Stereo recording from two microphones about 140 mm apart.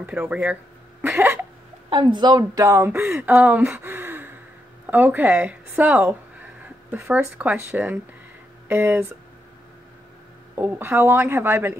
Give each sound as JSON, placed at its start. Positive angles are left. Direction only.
{"t": 0.0, "sound": "a woman's voice", "side_deg": -10}
{"t": 1.0, "sound": "cough", "side_deg": -15}
{"t": 1.9, "sound": "a woman's voice", "side_deg": -35}
{"t": 3.1, "sound": "a woman's voice", "side_deg": -10}
{"t": 10.5, "sound": "a woman's voice", "side_deg": -10}